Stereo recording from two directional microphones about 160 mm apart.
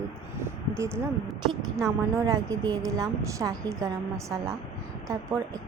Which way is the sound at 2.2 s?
25° right (ahead or behind).